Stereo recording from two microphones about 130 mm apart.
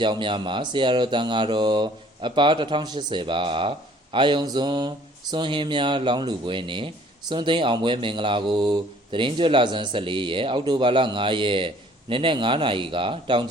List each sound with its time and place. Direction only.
0.0 s a man's voice: 35° right (ahead or behind)